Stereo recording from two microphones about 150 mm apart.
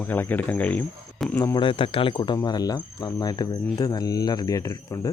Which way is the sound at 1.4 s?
20° left (ahead or behind).